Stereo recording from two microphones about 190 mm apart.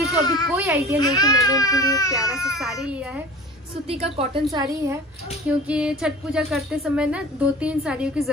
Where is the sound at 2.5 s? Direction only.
Centre (ahead or behind).